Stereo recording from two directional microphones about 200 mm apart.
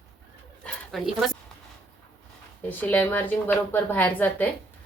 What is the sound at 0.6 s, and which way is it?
Dog, 5° left (ahead or behind).